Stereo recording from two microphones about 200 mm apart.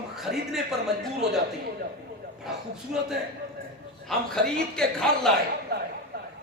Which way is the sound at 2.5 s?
Centre (ahead or behind).